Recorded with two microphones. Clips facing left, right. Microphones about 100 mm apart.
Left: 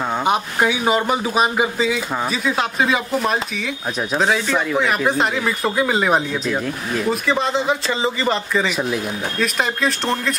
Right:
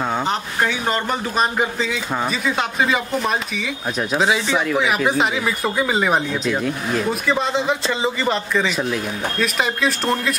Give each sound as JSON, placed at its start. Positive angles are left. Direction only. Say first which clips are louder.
{"t": 0.2, "sound": "speech", "louder": "left 3 dB", "side_deg": 10}